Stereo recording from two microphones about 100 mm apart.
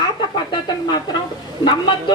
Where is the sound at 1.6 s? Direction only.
50° left (ahead or behind).